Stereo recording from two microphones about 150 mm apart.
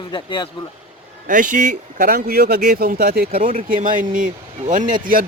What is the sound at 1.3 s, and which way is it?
Speech, 60° right (ahead or behind).